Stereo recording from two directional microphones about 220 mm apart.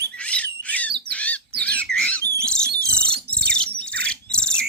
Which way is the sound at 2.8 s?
5° left (ahead or behind).